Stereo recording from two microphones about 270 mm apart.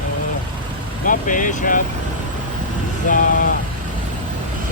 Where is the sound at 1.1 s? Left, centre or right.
Left.